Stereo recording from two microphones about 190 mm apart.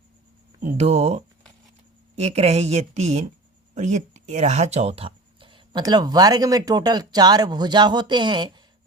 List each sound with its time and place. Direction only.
0.6 s speech: 35° right (ahead or behind)